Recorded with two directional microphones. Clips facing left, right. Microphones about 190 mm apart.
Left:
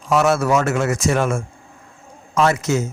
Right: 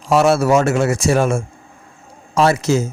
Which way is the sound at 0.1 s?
30° right (ahead or behind).